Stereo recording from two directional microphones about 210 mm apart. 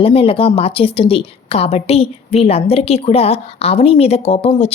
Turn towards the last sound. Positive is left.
turn(degrees=30)  # may be behind; listen again after turning